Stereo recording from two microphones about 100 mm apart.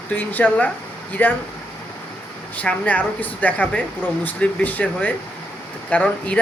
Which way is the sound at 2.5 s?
15° left (ahead or behind).